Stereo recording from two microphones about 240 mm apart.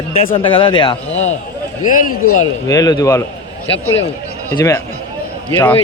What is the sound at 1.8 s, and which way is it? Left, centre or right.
Speech, left.